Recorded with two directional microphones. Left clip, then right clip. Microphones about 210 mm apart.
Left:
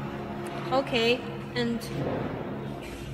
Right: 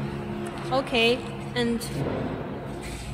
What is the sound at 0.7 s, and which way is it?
A woman's voice, 25° right (ahead or behind).